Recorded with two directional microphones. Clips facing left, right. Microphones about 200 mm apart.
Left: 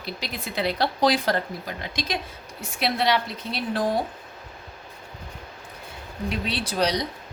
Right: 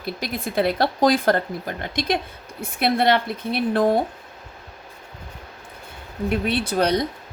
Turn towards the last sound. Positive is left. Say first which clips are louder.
# right 4 dB
turn(degrees=-55)  # may be behind; listen again after turning